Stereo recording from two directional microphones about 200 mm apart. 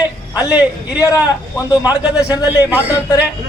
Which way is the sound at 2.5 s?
10° right (ahead or behind).